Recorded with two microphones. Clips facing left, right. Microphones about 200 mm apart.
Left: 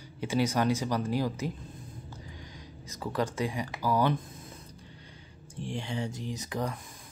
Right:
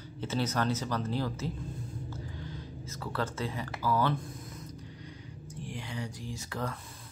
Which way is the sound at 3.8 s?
15° left (ahead or behind).